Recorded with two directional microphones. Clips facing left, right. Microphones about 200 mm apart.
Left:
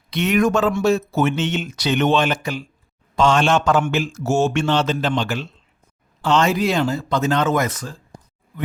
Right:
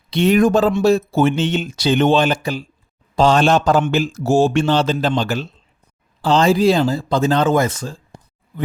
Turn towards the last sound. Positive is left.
turn(degrees=-30)  # may be behind; listen again after turning